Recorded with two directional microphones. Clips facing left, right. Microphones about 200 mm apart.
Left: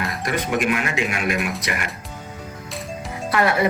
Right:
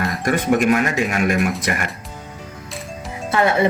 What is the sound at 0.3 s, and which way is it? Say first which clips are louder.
A man's voice: right 6 dB; 45° right (ahead or behind).